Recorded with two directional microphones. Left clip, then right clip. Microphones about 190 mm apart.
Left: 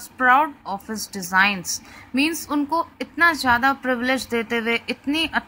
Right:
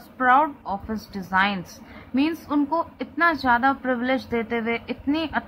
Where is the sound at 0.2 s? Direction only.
30° left (ahead or behind).